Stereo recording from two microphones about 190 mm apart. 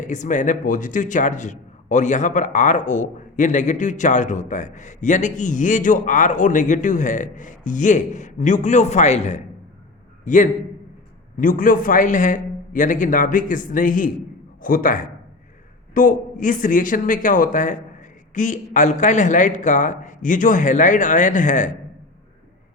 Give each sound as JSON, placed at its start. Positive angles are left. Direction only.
{"t": 0.0, "sound": "a man's voice", "side_deg": 40}